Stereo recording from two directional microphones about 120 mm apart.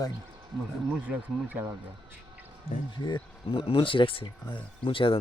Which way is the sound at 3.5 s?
45° left (ahead or behind).